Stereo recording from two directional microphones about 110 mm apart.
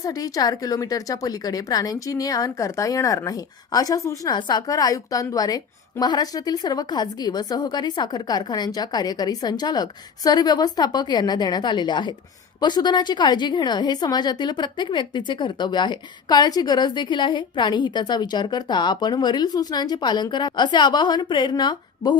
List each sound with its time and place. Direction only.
0.0 s a woman's voice: 30° left (ahead or behind)
4.4 s a woman's voice: 40° left (ahead or behind)